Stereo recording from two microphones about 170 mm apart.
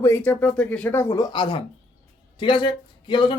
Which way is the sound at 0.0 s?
15° left (ahead or behind).